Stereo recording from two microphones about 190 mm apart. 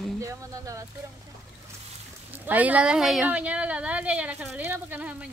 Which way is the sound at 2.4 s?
10° right (ahead or behind).